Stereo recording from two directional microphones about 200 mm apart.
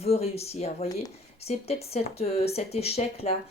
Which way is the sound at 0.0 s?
30° left (ahead or behind).